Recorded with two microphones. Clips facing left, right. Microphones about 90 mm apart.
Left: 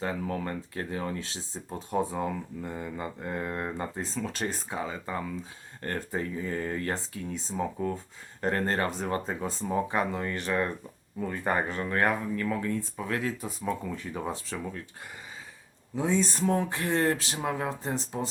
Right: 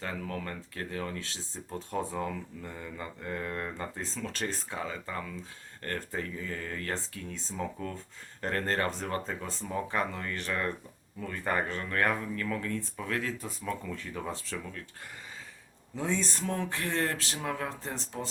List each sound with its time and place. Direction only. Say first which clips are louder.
0.0 s speech: left 5 dB; 20° left (ahead or behind)
16.0 s speech: left 5 dB; 10° left (ahead or behind)